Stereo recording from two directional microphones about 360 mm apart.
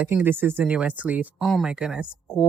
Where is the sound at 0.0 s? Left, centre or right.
Centre.